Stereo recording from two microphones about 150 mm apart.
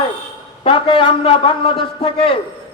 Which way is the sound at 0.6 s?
35° left (ahead or behind).